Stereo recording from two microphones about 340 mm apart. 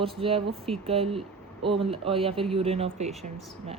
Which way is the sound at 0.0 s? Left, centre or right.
Centre.